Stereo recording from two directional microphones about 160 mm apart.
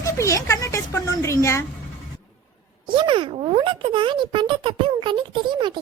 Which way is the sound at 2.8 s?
30° right (ahead or behind).